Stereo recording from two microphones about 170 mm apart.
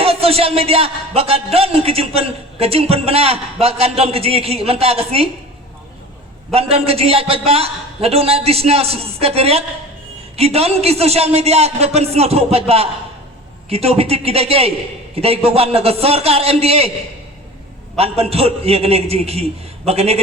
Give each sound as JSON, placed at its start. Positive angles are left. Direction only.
{"t": 0.0, "sound": "a man's voice", "side_deg": -35}
{"t": 6.5, "sound": "a man's voice", "side_deg": -35}
{"t": 17.9, "sound": "a man's voice", "side_deg": -35}